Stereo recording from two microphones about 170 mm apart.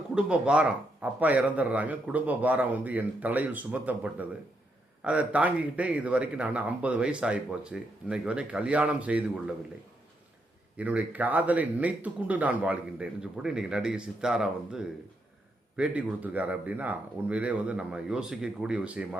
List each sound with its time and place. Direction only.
0.1 s a man's voice: 5° right (ahead or behind)
10.8 s a man's voice: 10° right (ahead or behind)